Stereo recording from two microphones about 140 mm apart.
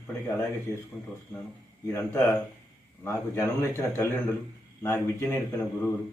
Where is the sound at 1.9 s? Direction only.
20° left (ahead or behind).